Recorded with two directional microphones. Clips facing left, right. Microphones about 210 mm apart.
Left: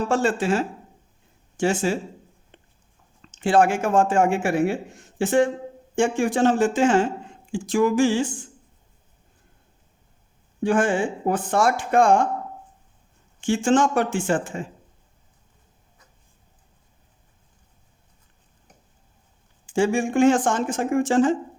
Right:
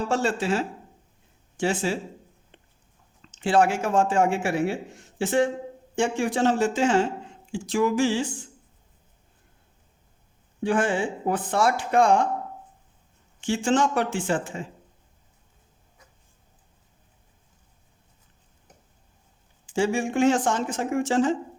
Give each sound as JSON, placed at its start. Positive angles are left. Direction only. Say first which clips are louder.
{"t": 0.1, "sound": "speech", "louder": "left 3 dB", "side_deg": 50}
{"t": 2.5, "sound": "a sound", "louder": "left 3 dB", "side_deg": 45}
{"t": 3.3, "sound": "speech", "louder": "left 2 dB", "side_deg": 50}
{"t": 10.6, "sound": "speech", "louder": "left 3 dB", "side_deg": 45}
{"t": 13.4, "sound": "speech", "louder": "left 3 dB", "side_deg": 50}
{"t": 19.6, "sound": "speech", "louder": "left 3 dB", "side_deg": 50}